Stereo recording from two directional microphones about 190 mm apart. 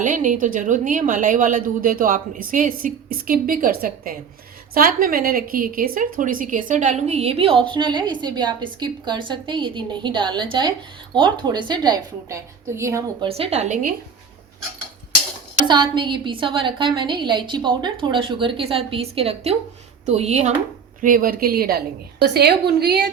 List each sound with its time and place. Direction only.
0.0 s a woman's voice: 40° right (ahead or behind); by 13.2 s 15° right (ahead or behind)
13.2 s a woman's voice: 30° right (ahead or behind)
15.6 s a woman's voice: 25° right (ahead or behind)
21.0 s a woman's voice: 45° right (ahead or behind)